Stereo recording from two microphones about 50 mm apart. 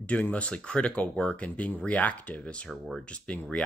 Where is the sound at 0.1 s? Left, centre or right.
Left.